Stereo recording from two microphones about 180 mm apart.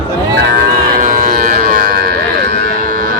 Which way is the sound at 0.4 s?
65° right (ahead or behind).